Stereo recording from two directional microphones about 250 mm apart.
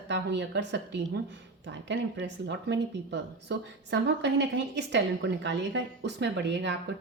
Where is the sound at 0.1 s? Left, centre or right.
Right.